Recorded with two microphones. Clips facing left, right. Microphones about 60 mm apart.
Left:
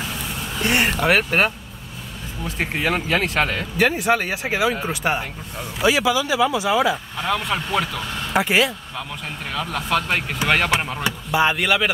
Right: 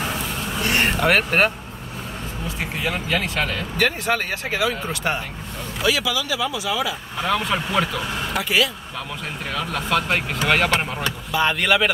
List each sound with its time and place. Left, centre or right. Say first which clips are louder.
0.8 s speech: even; centre
2.6 s speech: left 4 dB; left
2.9 s speech: left 2 dB; left
3.7 s speech: left 3 dB; centre
5.8 s speech: left 4 dB; left
7.2 s speech: right 1 dB; centre
8.3 s speech: left 4 dB; left
9.5 s speech: even; centre
11.1 s speech: left 3 dB; centre
11.5 s speech: right 1 dB; centre